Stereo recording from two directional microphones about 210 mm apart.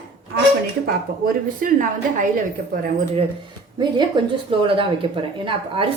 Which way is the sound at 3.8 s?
20° right (ahead or behind).